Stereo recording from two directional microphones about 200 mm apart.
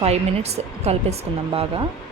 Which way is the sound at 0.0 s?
30° right (ahead or behind).